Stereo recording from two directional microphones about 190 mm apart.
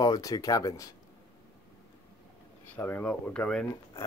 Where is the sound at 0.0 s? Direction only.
20° left (ahead or behind).